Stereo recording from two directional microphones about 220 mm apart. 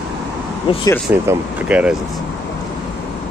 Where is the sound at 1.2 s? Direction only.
10° right (ahead or behind).